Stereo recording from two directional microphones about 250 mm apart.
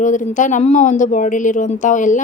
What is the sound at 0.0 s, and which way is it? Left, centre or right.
Speech, left.